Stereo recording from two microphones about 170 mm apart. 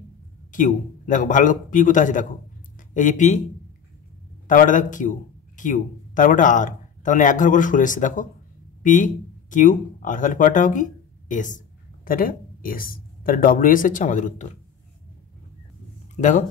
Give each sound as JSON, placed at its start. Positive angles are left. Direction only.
{"t": 0.5, "sound": "speech", "side_deg": 50}
{"t": 4.5, "sound": "speech", "side_deg": 50}
{"t": 16.2, "sound": "speech", "side_deg": 50}